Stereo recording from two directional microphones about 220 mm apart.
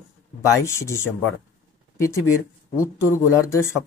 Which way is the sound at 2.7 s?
15° left (ahead or behind).